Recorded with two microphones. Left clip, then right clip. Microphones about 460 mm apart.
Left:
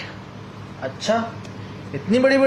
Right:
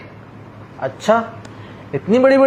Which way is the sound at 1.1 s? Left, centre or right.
Right.